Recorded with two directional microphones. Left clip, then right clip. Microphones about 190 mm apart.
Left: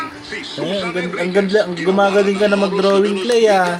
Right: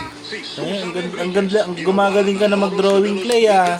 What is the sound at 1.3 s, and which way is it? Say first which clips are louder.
Speech: left 2 dB; 15° left (ahead or behind).